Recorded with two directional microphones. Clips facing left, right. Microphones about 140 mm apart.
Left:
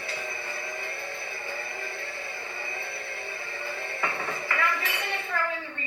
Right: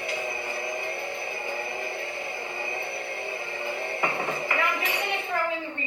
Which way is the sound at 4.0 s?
20° right (ahead or behind).